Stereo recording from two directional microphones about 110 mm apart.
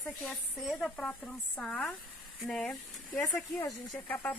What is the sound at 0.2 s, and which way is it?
Speech, 5° left (ahead or behind).